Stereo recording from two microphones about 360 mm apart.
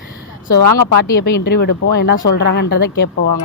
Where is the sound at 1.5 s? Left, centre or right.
Left.